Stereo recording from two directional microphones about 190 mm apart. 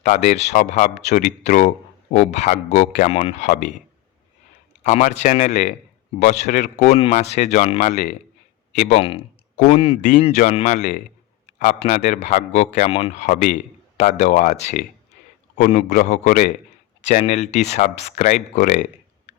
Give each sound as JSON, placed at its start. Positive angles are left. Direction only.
{"t": 0.0, "sound": "speech", "side_deg": 40}
{"t": 4.8, "sound": "a man's voice", "side_deg": 35}